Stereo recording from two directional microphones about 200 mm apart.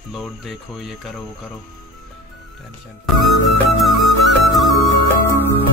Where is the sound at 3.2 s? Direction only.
Centre (ahead or behind).